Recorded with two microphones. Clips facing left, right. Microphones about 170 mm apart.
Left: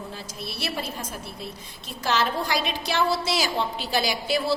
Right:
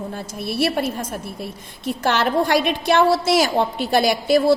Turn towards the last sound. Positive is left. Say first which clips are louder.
# right 9 dB
turn(degrees=-50)  # may be behind; listen again after turning